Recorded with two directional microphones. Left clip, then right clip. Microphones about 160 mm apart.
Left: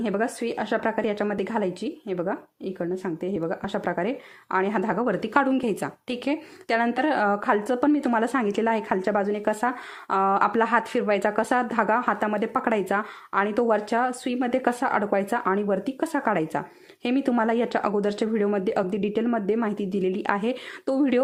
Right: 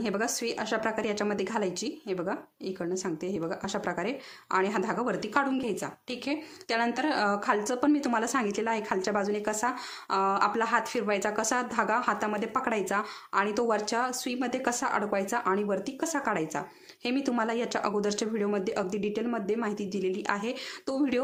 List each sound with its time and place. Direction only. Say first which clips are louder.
0.0 s a woman's voice: left 4 dB; 25° left (ahead or behind)